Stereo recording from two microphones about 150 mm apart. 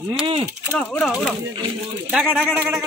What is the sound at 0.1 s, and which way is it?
Speech, 40° right (ahead or behind).